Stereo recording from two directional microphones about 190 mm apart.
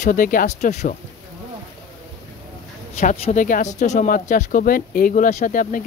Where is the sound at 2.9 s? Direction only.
40° left (ahead or behind).